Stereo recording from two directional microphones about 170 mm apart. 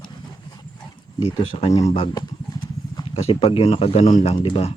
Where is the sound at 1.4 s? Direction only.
35° left (ahead or behind).